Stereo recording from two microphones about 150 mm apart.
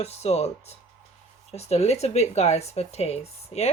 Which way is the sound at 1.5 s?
45° left (ahead or behind).